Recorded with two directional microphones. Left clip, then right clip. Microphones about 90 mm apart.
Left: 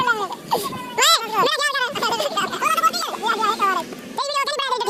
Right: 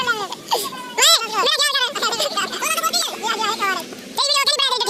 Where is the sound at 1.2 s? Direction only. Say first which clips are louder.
Left 1 dB; 60° left (ahead or behind).